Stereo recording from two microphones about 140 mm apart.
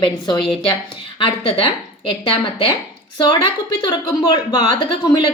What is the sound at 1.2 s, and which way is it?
Speech, 40° left (ahead or behind).